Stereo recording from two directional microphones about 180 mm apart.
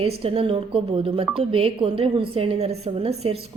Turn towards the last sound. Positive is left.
turn(degrees=-35)  # may be behind; listen again after turning